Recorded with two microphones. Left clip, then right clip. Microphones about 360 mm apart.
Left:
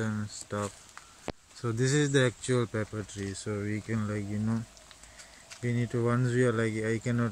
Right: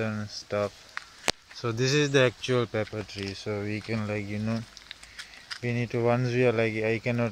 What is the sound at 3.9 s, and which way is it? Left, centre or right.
Speech, centre.